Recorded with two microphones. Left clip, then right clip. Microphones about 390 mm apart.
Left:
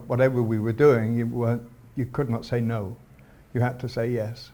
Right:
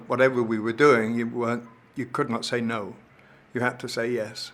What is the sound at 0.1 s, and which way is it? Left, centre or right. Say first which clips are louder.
Speech: right 1 dB; left.